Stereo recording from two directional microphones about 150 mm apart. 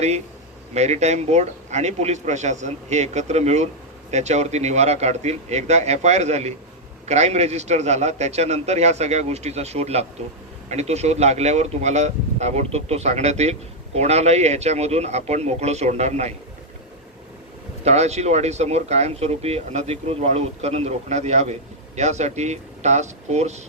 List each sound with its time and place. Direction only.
0.7 s speech: 45° right (ahead or behind)
17.8 s speech: 45° right (ahead or behind)